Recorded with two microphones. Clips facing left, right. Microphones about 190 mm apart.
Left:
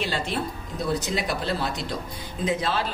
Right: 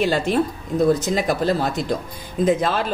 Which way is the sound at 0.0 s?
45° right (ahead or behind).